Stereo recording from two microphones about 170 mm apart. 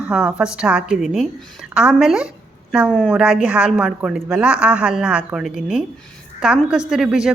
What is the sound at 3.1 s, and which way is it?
A woman's voice, 5° right (ahead or behind).